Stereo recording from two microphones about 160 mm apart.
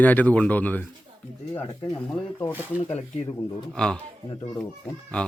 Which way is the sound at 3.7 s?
5° left (ahead or behind).